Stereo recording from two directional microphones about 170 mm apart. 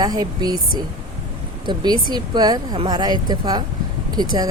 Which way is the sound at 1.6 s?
25° right (ahead or behind).